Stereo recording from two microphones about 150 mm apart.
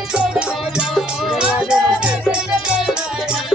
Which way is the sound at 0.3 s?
5° right (ahead or behind).